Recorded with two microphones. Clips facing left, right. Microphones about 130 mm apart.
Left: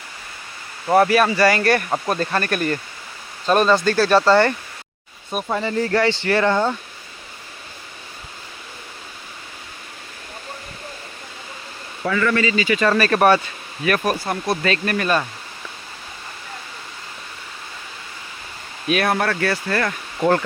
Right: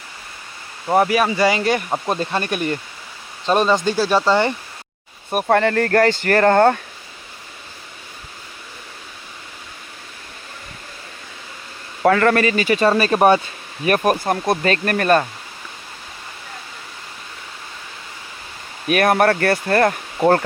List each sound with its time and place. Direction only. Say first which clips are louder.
0.9 s speech: left 1 dB; 15° right (ahead or behind)
5.3 s speech: right 6 dB; 60° right (ahead or behind)
12.0 s speech: right 5 dB; 55° right (ahead or behind)
12.8 s speech: right 2 dB; 25° right (ahead or behind)
13.8 s speech: right 3 dB; 45° right (ahead or behind)
18.9 s speech: right 5 dB; 50° right (ahead or behind)